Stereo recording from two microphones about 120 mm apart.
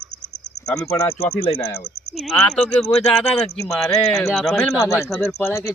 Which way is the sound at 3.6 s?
20° left (ahead or behind).